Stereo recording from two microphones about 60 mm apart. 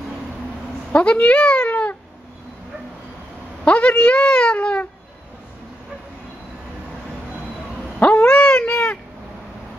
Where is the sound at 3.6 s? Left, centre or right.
Left.